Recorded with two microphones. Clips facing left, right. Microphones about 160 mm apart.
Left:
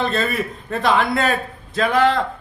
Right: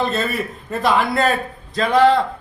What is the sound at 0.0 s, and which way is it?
A man's voice, centre (ahead or behind).